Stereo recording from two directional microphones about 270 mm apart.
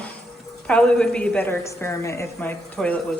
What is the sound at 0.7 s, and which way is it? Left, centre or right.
A woman's voice, centre.